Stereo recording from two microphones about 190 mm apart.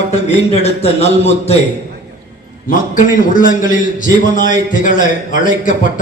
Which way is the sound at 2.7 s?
45° left (ahead or behind).